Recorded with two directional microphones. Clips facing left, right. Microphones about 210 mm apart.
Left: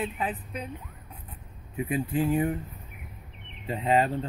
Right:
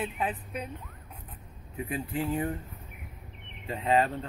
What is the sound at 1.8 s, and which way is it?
Speech, 15° left (ahead or behind).